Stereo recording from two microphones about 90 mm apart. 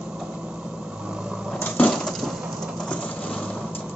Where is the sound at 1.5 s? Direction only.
20° left (ahead or behind).